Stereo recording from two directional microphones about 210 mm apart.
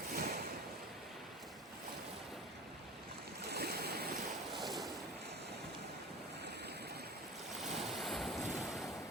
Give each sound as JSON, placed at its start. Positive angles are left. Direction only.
{"t": 0.2, "sound": "ocean", "side_deg": -45}
{"t": 3.4, "sound": "boat", "side_deg": -50}
{"t": 4.5, "sound": "waves", "side_deg": 0}
{"t": 7.6, "sound": "waves", "side_deg": 0}